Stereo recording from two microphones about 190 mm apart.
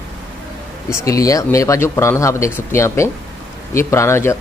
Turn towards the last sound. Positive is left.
turn(degrees=15)  # may be behind; listen again after turning